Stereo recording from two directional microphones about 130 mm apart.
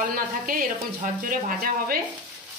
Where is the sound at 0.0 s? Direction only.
90° right.